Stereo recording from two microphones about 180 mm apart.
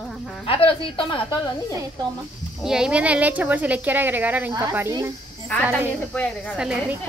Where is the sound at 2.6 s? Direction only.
5° right (ahead or behind).